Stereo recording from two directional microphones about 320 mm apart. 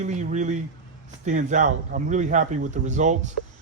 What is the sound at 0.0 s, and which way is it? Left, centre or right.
Speech, right.